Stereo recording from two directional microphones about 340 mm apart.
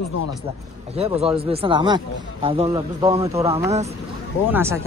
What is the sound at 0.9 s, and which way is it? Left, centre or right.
Speech, centre.